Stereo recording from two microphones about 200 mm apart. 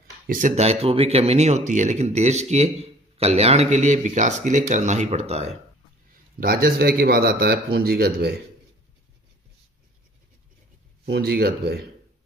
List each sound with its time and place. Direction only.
0.3 s speech: 40° right (ahead or behind)
6.4 s speech: 50° right (ahead or behind)
11.1 s speech: 50° right (ahead or behind)